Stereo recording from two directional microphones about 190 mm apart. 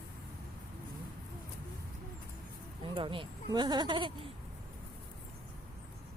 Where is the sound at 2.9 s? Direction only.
25° right (ahead or behind).